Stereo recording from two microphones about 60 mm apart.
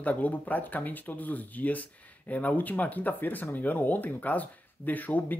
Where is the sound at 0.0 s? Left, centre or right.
Left.